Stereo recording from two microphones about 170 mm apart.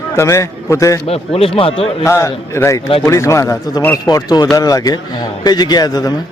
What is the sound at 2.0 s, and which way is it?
A man's voice, 15° left (ahead or behind).